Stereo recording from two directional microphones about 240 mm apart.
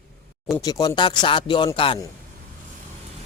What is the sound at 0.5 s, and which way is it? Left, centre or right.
Speech, centre.